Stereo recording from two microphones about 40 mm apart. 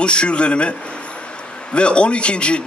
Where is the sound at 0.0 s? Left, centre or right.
Left.